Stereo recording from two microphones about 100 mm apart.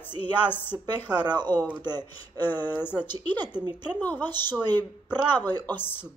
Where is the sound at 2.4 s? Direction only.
20° left (ahead or behind).